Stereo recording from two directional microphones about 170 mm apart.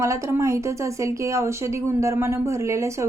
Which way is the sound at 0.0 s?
15° right (ahead or behind).